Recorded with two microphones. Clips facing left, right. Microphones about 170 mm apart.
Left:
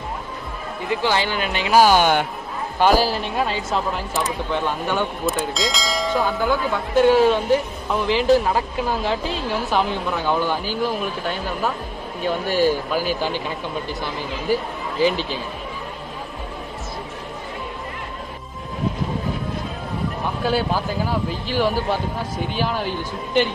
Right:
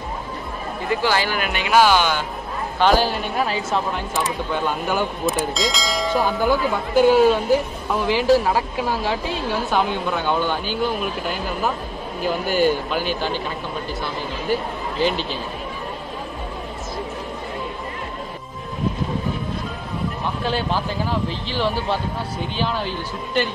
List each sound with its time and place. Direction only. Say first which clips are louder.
1.0 s speech: left 1 dB; 25° left (ahead or behind); by 2.2 s 50° left (ahead or behind)
2.8 s speech: left 1 dB; 5° left (ahead or behind)
14.5 s speech: left 1 dB; 10° left (ahead or behind)
20.4 s speech: left 2 dB; 10° left (ahead or behind)